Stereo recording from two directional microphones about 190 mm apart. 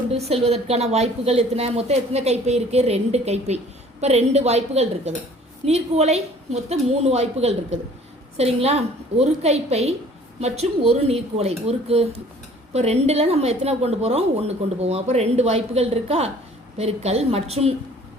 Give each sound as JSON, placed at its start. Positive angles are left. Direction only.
{"t": 0.1, "sound": "a woman's voice", "side_deg": -30}